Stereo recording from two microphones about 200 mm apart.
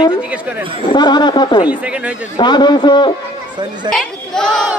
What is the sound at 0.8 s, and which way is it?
Speech, 20° left (ahead or behind).